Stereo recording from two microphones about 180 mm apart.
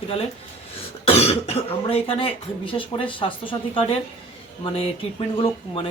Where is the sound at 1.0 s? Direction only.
35° left (ahead or behind).